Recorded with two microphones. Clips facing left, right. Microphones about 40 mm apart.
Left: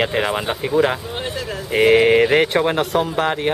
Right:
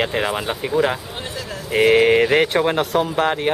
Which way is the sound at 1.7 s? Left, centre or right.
Centre.